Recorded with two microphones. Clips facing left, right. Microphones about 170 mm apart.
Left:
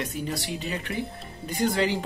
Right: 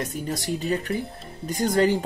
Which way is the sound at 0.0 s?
45° right (ahead or behind).